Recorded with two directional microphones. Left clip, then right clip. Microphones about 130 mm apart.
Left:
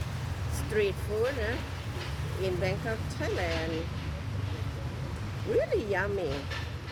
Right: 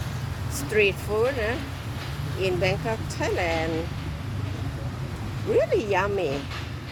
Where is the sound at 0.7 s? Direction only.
25° right (ahead or behind).